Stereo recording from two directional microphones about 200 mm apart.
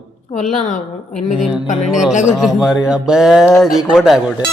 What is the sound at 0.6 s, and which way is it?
A woman's voice, 40° left (ahead or behind).